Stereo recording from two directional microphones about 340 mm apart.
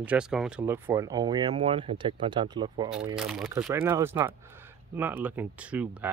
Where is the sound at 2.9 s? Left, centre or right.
Centre.